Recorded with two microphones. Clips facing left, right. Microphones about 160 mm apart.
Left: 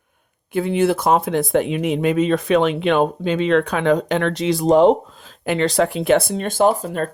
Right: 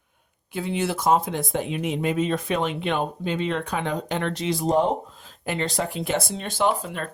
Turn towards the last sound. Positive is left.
turn(degrees=40)  # may be behind; listen again after turning